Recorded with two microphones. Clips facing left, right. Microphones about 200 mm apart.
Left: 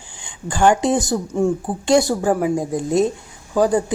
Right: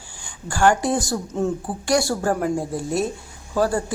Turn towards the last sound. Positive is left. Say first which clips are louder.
# left 4 dB
turn(degrees=15)  # may be behind; listen again after turning